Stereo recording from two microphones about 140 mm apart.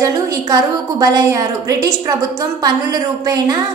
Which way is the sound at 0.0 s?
25° right (ahead or behind).